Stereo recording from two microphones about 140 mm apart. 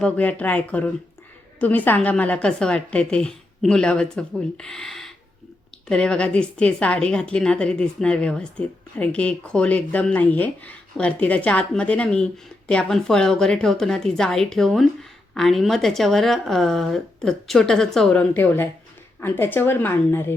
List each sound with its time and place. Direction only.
0.0 s a woman's voice: 10° left (ahead or behind)